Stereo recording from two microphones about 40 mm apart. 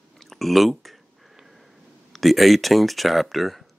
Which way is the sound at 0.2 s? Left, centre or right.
Centre.